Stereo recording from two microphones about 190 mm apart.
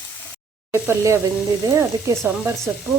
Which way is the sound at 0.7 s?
15° right (ahead or behind).